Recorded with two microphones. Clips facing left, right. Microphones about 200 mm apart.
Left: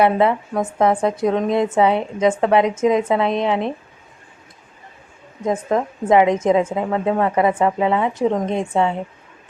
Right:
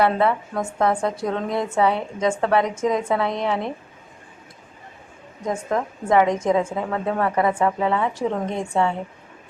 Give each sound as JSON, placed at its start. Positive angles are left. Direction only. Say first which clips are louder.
{"t": 0.0, "sound": "a woman's voice", "louder": "left 3 dB", "side_deg": 20}
{"t": 5.5, "sound": "a woman's voice", "louder": "left 4 dB", "side_deg": 20}